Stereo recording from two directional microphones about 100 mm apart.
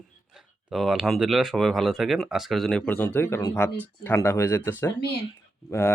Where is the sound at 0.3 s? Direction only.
Centre (ahead or behind).